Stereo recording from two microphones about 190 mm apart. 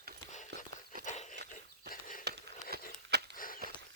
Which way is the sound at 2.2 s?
60° right (ahead or behind).